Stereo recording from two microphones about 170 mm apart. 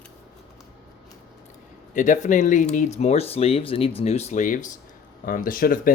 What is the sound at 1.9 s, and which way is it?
Speech, 45° left (ahead or behind).